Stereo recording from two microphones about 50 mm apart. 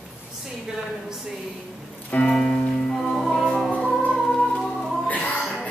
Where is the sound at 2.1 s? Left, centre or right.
Centre.